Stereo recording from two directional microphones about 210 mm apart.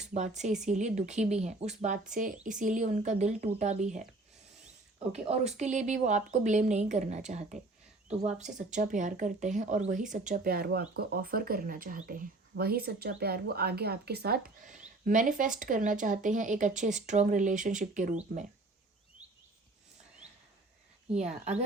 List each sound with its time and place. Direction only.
0.1 s speech: 35° right (ahead or behind)
5.3 s speech: 30° right (ahead or behind)
21.2 s speech: 30° right (ahead or behind)